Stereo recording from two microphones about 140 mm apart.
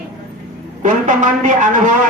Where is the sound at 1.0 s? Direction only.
65° right (ahead or behind).